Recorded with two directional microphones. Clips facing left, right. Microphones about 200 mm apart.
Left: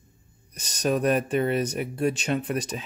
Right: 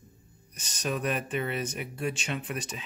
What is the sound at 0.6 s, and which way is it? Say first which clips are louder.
Speech: left 7 dB; 40° left (ahead or behind).